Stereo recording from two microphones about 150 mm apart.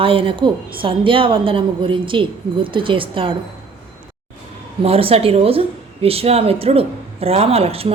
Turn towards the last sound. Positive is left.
turn(degrees=-40)  # may be behind; listen again after turning